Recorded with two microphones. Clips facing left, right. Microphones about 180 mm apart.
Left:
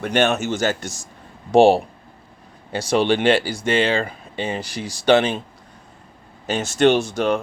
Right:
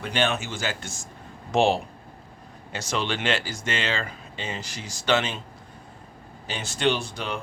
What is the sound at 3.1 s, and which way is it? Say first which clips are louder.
Speech: left 10 dB; 30° left (ahead or behind).